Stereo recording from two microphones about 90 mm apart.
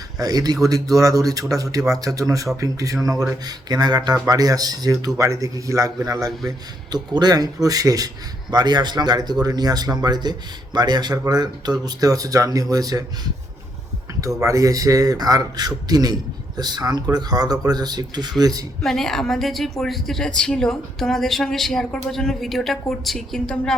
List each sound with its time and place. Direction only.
0.2 s speech: 45° right (ahead or behind)
18.8 s a woman's voice: 5° left (ahead or behind)